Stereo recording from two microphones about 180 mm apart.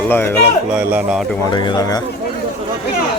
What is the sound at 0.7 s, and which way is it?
Speech, 10° right (ahead or behind).